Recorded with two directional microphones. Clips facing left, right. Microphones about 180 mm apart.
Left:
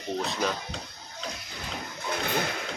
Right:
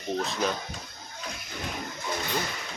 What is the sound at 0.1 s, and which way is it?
Speech, centre (ahead or behind).